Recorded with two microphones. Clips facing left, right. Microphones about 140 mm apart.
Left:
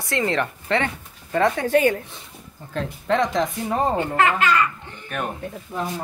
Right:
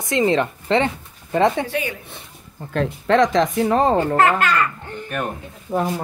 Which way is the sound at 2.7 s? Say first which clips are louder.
Right 5 dB; 85° right.